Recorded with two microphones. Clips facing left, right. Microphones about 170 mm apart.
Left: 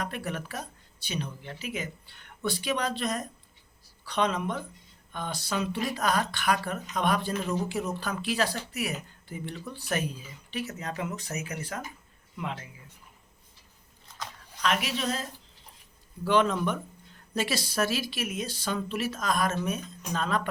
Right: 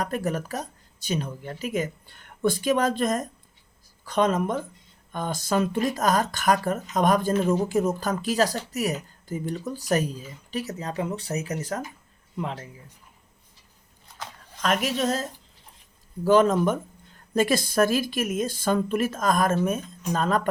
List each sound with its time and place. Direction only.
0.0 s speech: 40° right (ahead or behind)
14.6 s speech: 45° right (ahead or behind)